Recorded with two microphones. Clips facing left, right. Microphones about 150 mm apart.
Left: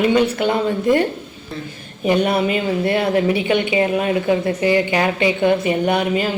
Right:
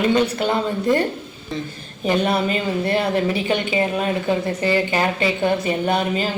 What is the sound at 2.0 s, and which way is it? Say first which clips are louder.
A woman's voice: left 3 dB; 15° left (ahead or behind).